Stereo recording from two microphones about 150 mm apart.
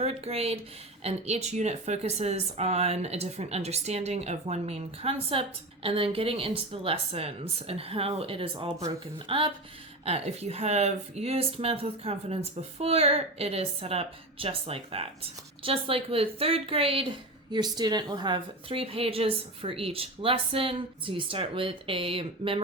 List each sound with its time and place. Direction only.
0.0 s speech: 40° right (ahead or behind)